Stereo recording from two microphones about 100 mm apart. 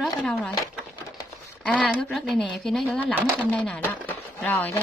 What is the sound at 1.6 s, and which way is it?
Speech, 10° left (ahead or behind).